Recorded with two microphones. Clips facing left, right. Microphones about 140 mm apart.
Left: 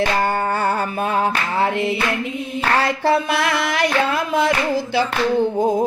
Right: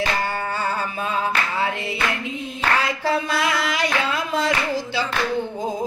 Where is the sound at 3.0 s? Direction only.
65° left (ahead or behind).